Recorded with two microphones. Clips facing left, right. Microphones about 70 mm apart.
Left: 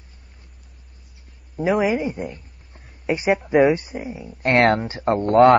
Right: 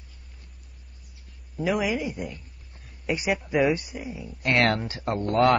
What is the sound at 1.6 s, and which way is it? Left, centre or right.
Speech, left.